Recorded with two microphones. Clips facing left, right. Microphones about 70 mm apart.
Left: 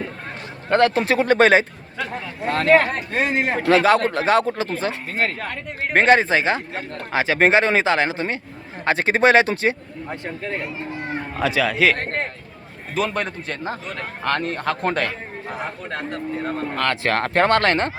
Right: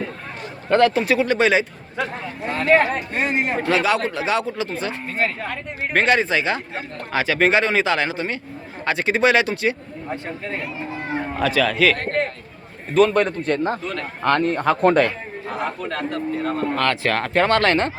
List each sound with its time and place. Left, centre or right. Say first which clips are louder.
0.7 s speech: right 1 dB; left
2.5 s speech: left 1 dB; left
3.7 s speech: left 6 dB; left
11.3 s speech: even; centre
12.9 s a man's voice: right 7 dB; centre
15.9 s speech: right 3 dB; centre